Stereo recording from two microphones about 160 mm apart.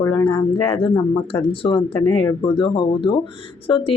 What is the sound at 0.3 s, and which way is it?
A woman's voice, 30° left (ahead or behind).